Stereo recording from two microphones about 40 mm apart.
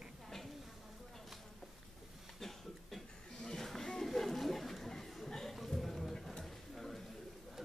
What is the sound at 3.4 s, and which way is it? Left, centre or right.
Chatter, centre.